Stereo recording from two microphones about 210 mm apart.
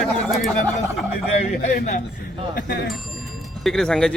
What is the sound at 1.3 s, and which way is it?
Speech, 35° left (ahead or behind).